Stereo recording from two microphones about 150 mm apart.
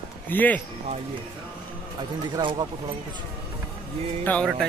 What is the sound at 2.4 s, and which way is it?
Speech, 30° right (ahead or behind).